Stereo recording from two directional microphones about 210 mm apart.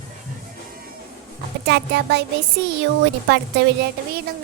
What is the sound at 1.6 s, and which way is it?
Speech, 55° right (ahead or behind).